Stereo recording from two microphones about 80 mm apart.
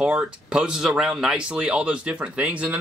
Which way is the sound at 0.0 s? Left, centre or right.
Centre.